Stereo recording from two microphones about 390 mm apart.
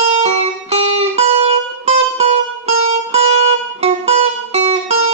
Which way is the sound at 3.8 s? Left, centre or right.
Centre.